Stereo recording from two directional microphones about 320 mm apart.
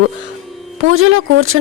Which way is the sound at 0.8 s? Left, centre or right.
Right.